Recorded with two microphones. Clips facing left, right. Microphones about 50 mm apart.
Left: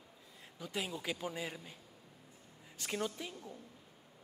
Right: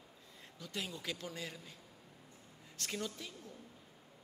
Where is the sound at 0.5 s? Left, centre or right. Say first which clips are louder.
Left 3 dB; centre.